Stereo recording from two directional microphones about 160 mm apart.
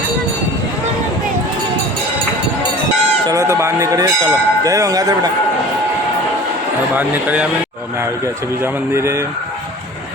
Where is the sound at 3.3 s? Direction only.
20° right (ahead or behind).